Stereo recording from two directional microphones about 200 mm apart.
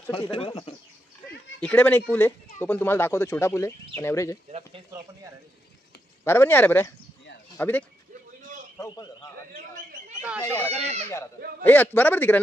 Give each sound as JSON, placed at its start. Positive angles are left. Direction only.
{"t": 0.1, "sound": "speech", "side_deg": 25}
{"t": 1.6, "sound": "speech", "side_deg": 10}
{"t": 4.5, "sound": "a sound", "side_deg": -30}
{"t": 6.2, "sound": "speech", "side_deg": 10}
{"t": 8.4, "sound": "a sound", "side_deg": -40}
{"t": 8.7, "sound": "a man's voice", "side_deg": 15}
{"t": 10.4, "sound": "speech", "side_deg": 15}
{"t": 10.7, "sound": "speech", "side_deg": -35}
{"t": 11.6, "sound": "speech", "side_deg": 10}